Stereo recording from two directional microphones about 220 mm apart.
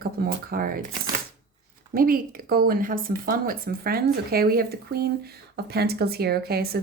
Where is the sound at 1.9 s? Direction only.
40° right (ahead or behind).